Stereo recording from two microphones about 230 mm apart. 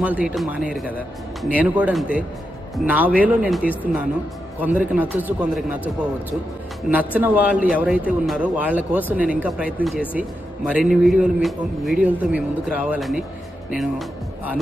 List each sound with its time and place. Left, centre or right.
0.0 s speech: centre
7.2 s a man's voice: centre